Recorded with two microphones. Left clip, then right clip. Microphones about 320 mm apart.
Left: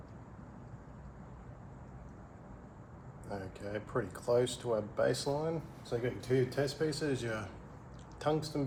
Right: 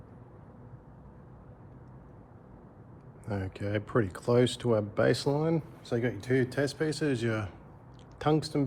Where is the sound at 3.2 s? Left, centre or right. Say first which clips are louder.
Right 6 dB; right.